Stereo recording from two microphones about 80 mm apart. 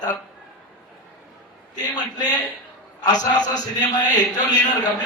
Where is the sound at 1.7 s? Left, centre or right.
Left.